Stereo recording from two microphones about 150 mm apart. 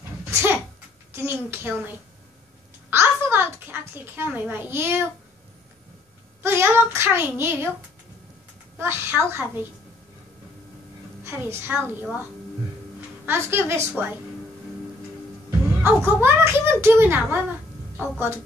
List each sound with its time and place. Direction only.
0.3 s a child's voice: 15° right (ahead or behind)
6.4 s speech: 15° right (ahead or behind)
8.7 s speech: 15° right (ahead or behind)
11.2 s speech: 15° right (ahead or behind)
15.8 s speech: 15° right (ahead or behind)
17.9 s a woman's voice: 10° left (ahead or behind)